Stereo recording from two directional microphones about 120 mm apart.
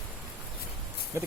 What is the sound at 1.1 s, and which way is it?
Speech, 20° right (ahead or behind).